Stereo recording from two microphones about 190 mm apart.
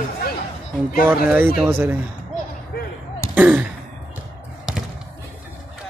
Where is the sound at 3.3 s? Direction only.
10° right (ahead or behind).